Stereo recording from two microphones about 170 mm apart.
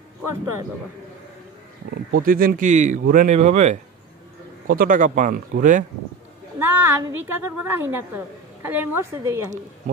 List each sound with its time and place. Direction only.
2.2 s speech: 55° right (ahead or behind)
6.6 s a woman's voice: 10° right (ahead or behind)